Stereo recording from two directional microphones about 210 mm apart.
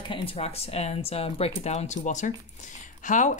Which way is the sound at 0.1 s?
25° left (ahead or behind).